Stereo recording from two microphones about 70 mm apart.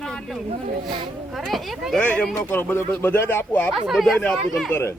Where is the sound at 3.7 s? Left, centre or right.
Centre.